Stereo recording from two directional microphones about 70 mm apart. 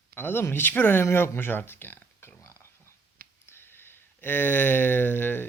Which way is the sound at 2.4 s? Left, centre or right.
Left.